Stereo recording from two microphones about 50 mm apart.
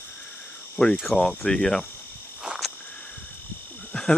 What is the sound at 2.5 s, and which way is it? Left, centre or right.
Cricket, right.